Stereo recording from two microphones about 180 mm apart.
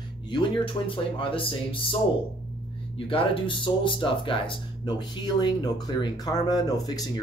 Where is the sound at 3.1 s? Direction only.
30° left (ahead or behind).